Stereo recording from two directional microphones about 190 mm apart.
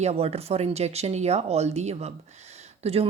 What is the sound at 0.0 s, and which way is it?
Speech, 35° right (ahead or behind).